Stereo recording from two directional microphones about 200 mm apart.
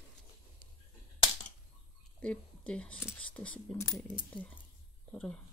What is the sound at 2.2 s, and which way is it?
Speech, 5° left (ahead or behind).